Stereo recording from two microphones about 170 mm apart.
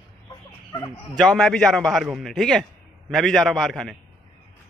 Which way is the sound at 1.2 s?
Centre (ahead or behind).